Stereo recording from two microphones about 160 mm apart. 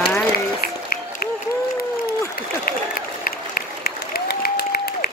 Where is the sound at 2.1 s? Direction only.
70° left (ahead or behind).